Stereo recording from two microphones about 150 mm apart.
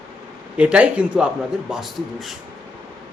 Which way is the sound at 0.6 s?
10° right (ahead or behind).